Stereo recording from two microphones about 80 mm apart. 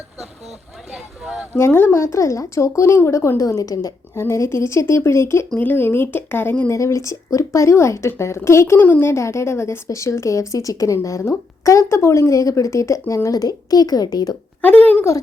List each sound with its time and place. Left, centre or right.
0.9 s speech: centre
1.5 s speech: left
4.1 s speech: left
5.5 s speech: left
6.7 s speech: left
14.6 s speech: centre